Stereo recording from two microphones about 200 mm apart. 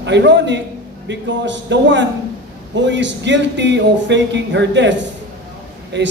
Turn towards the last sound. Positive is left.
turn(degrees=-60)  # may be behind; listen again after turning